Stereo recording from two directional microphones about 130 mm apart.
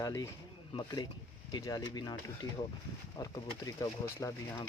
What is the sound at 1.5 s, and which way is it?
Speech, 30° left (ahead or behind).